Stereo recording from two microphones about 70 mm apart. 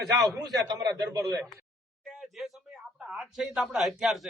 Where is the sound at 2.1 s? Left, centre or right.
Centre.